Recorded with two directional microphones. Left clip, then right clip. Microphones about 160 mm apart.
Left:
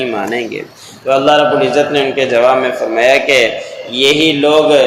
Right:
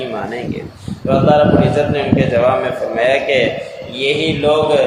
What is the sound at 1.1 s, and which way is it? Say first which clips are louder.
A man's voice: left 2 dB; 30° left (ahead or behind).